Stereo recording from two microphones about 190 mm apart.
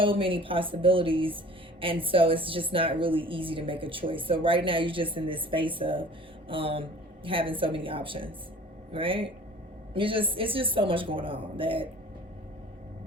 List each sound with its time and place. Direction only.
0.0 s a woman's voice: 30° right (ahead or behind)